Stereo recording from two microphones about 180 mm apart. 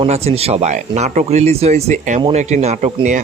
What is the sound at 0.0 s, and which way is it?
Speech, 35° right (ahead or behind).